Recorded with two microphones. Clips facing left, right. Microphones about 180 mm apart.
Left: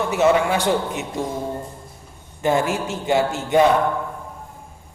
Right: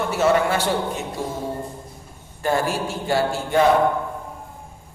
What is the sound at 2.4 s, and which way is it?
Speech, 20° left (ahead or behind).